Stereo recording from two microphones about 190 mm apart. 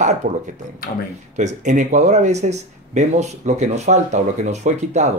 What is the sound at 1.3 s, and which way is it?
Speech, 40° right (ahead or behind).